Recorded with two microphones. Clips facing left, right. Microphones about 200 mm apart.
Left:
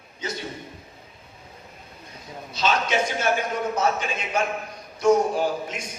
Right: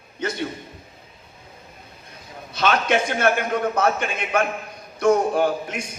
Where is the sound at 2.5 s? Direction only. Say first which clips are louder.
Right 3 dB; 55° right (ahead or behind).